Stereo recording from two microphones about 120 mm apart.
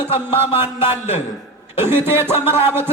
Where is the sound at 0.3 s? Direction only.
20° right (ahead or behind).